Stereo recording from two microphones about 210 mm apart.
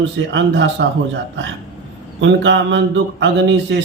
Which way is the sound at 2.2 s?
60° right (ahead or behind).